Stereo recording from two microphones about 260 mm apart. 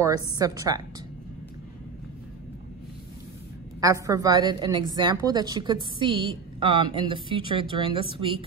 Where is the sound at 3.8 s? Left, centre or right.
Centre.